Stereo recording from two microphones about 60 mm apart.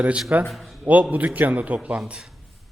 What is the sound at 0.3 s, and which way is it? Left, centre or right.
A man's voice, right.